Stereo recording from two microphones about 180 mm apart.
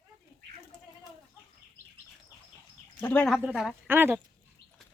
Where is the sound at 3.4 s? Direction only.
5° right (ahead or behind).